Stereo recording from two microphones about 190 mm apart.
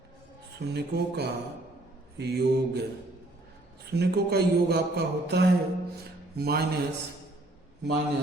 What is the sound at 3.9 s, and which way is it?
Speech, 55° right (ahead or behind).